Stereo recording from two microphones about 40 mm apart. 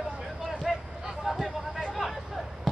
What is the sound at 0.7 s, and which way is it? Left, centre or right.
Vehicle, centre.